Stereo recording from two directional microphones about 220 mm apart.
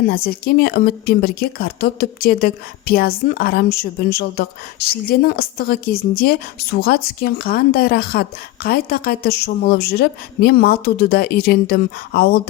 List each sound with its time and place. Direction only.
0.1 s a woman's voice: 45° left (ahead or behind)